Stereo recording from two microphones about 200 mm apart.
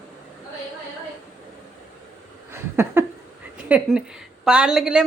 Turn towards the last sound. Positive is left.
turn(degrees=-5)  # may be behind; listen again after turning